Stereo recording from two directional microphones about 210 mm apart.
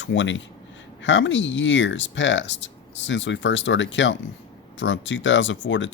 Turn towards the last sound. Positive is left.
turn(degrees=60)  # may be behind; listen again after turning